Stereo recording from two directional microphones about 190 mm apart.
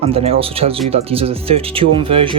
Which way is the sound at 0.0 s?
30° right (ahead or behind).